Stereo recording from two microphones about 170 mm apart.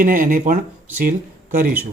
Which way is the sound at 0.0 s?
55° right (ahead or behind).